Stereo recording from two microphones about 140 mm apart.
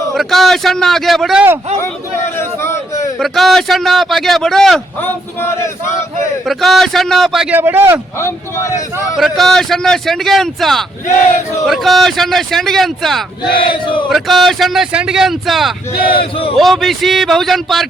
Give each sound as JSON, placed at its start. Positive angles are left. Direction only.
{"t": 0.1, "sound": "a man's voice", "side_deg": 0}
{"t": 2.4, "sound": "a sound", "side_deg": 20}
{"t": 3.2, "sound": "a man's voice", "side_deg": 0}
{"t": 5.0, "sound": "speech", "side_deg": 15}
{"t": 6.4, "sound": "a man's voice", "side_deg": 0}
{"t": 7.5, "sound": "a man's voice", "side_deg": -15}
{"t": 8.2, "sound": "speech", "side_deg": 20}
{"t": 9.1, "sound": "a man's voice", "side_deg": 0}
{"t": 13.6, "sound": "chant", "side_deg": 35}
{"t": 14.1, "sound": "a man's voice", "side_deg": 0}
{"t": 16.0, "sound": "chant", "side_deg": 40}
{"t": 16.6, "sound": "a man's voice", "side_deg": 0}